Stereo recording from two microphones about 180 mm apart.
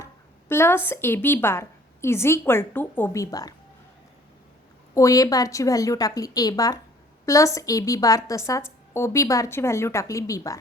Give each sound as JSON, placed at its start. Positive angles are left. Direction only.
{"t": 0.0, "sound": "a sound", "side_deg": 15}
{"t": 0.9, "sound": "a woman's voice", "side_deg": 10}
{"t": 4.9, "sound": "a woman's voice", "side_deg": 20}